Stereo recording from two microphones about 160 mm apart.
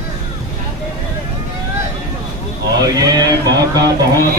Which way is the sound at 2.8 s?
25° right (ahead or behind).